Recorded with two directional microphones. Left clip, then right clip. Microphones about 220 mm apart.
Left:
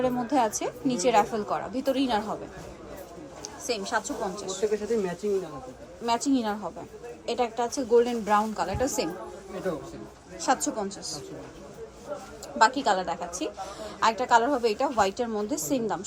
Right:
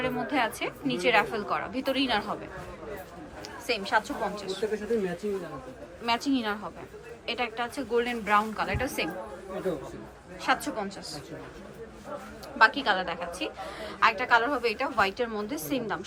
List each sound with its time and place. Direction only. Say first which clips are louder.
0.0 s a woman's voice: left 3 dB; 20° left (ahead or behind)
3.7 s a woman's voice: right 2 dB; 15° left (ahead or behind)
6.1 s a woman's voice: left 2 dB; 15° left (ahead or behind)
10.4 s a woman's voice: left 1 dB; 20° left (ahead or behind)
12.5 s a woman's voice: even; 15° left (ahead or behind)